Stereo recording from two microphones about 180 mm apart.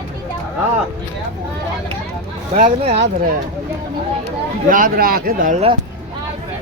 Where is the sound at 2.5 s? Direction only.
40° right (ahead or behind).